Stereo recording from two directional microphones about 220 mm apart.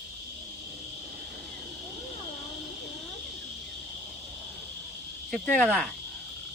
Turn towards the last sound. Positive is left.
turn(degrees=0)  # may be behind; listen again after turning